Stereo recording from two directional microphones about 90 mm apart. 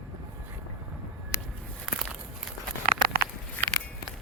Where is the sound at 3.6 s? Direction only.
20° left (ahead or behind).